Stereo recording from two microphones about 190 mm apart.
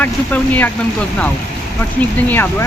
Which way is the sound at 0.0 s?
10° left (ahead or behind).